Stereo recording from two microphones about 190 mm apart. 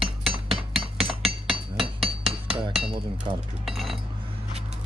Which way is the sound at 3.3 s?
30° right (ahead or behind).